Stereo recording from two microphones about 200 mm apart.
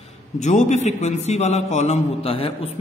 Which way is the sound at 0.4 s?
35° left (ahead or behind).